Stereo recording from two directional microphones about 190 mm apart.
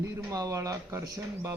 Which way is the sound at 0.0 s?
15° right (ahead or behind).